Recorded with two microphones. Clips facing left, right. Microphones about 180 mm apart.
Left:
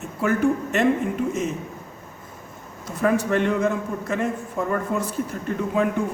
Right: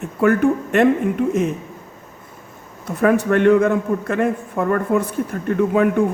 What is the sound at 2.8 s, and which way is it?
A man's voice, 60° right (ahead or behind).